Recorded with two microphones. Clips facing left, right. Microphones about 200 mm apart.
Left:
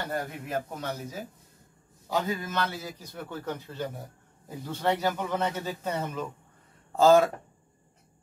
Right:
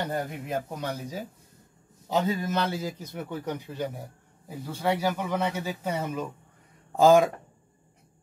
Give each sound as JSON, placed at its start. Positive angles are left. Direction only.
{"t": 0.1, "sound": "a man's voice", "side_deg": -15}
{"t": 2.0, "sound": "a man's voice", "side_deg": -20}